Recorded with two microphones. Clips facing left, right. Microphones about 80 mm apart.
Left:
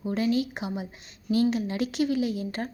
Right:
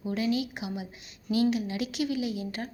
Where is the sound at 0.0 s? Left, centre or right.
Left.